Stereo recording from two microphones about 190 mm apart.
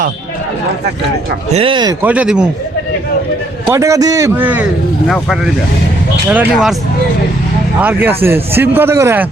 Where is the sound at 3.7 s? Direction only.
15° right (ahead or behind).